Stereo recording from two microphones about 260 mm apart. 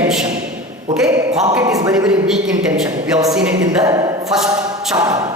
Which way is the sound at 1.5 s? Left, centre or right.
Centre.